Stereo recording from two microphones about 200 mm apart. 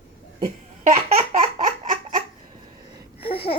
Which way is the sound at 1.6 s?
40° right (ahead or behind).